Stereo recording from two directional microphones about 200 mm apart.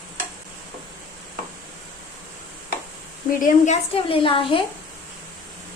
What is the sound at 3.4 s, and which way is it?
A woman's voice, 35° left (ahead or behind).